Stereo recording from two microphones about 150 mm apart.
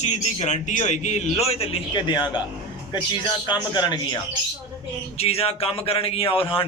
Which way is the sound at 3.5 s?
30° left (ahead or behind).